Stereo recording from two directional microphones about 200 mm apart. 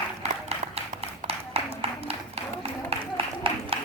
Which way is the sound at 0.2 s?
30° right (ahead or behind).